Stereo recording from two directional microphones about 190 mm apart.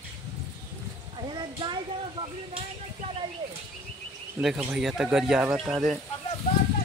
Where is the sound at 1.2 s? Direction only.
25° right (ahead or behind).